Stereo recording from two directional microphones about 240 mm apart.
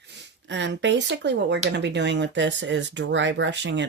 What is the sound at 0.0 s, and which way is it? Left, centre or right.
Speech, right.